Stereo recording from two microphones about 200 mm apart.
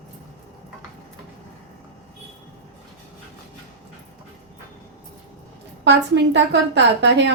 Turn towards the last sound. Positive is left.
turn(degrees=-60)  # may be behind; listen again after turning